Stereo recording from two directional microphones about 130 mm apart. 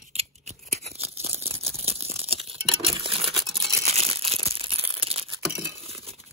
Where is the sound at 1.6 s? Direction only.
50° right (ahead or behind).